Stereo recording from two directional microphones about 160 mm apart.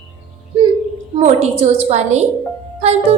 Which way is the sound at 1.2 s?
45° right (ahead or behind).